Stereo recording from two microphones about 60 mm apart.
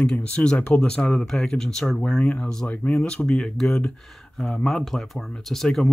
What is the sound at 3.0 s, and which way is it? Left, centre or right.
Speech, centre.